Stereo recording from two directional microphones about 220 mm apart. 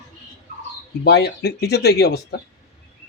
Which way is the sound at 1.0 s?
45° left (ahead or behind).